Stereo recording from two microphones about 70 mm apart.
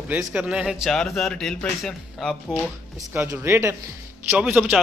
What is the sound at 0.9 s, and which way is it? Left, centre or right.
Speech, centre.